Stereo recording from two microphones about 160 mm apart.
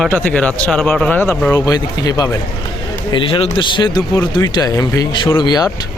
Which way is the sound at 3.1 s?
35° left (ahead or behind).